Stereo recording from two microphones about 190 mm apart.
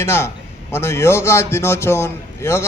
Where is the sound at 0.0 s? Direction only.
15° left (ahead or behind).